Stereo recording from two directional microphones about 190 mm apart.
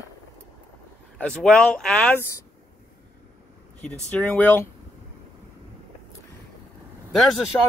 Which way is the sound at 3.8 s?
10° left (ahead or behind).